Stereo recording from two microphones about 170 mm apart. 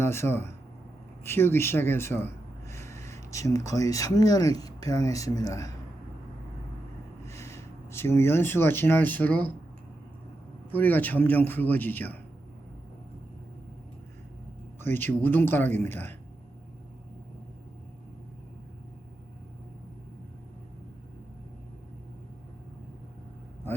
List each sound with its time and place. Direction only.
0.0 s a man's voice: 15° left (ahead or behind)
7.3 s speech: 15° left (ahead or behind)
10.7 s a man's voice: 10° left (ahead or behind)
14.8 s a man's voice: 10° left (ahead or behind)